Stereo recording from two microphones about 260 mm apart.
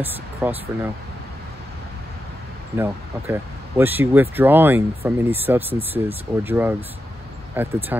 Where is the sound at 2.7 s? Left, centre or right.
Centre.